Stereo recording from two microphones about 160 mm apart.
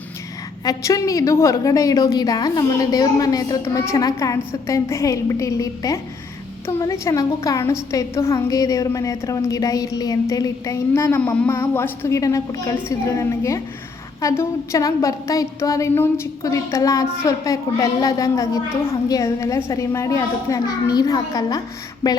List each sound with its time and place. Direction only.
0.6 s a woman's voice: 20° left (ahead or behind)